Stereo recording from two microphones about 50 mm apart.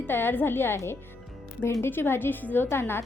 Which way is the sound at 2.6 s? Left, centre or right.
Left.